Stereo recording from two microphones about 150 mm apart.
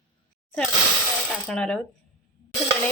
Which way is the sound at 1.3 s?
5° left (ahead or behind).